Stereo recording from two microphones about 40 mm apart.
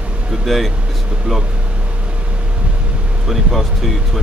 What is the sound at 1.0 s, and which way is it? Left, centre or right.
Speech, right.